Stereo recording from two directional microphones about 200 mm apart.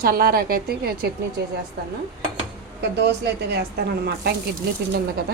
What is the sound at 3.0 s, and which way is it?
A woman's voice, 55° right (ahead or behind).